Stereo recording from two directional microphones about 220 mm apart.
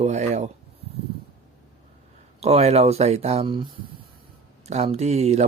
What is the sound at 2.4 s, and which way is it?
Speech, 30° right (ahead or behind).